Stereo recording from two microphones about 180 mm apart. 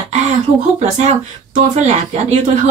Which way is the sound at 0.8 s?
40° right (ahead or behind).